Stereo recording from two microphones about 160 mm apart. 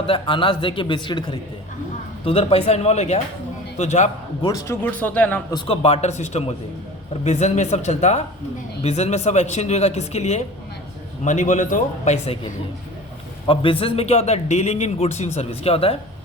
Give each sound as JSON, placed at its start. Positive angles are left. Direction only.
{"t": 0.1, "sound": "a man's voice", "side_deg": 30}
{"t": 4.4, "sound": "speech", "side_deg": 20}
{"t": 5.6, "sound": "speech", "side_deg": 35}
{"t": 13.5, "sound": "a man's voice", "side_deg": 35}